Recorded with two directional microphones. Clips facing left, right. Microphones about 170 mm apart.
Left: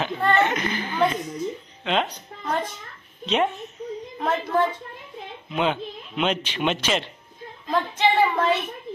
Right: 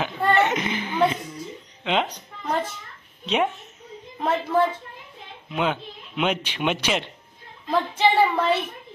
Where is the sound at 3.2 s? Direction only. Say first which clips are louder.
Left 1 dB; 10° right (ahead or behind).